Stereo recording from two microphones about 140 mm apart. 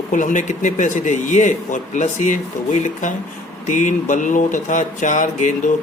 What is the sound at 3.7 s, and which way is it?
A man's voice, 65° left (ahead or behind).